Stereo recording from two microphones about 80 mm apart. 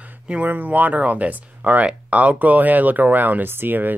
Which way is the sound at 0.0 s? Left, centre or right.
Centre.